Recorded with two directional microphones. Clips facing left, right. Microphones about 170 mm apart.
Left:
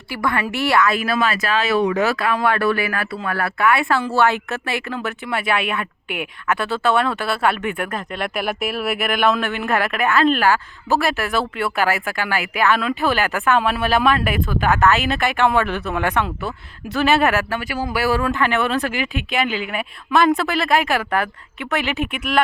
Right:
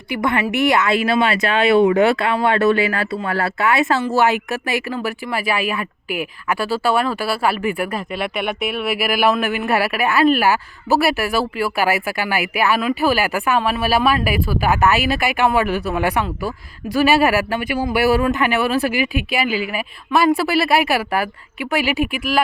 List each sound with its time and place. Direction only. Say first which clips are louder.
0.1 s a woman's voice: right 3 dB; 20° right (ahead or behind)
5.3 s a woman's voice: left 1 dB; 5° right (ahead or behind)